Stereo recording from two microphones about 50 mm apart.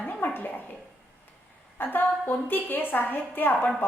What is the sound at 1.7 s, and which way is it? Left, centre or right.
A woman's voice, left.